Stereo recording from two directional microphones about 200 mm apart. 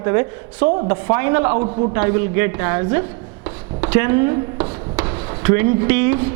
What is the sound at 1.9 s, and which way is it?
A man's voice, 10° right (ahead or behind).